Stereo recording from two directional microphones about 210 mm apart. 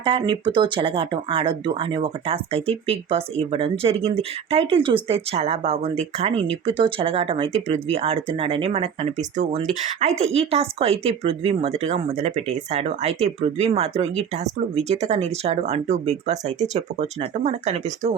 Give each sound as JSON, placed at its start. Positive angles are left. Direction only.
{"t": 0.0, "sound": "speech", "side_deg": -20}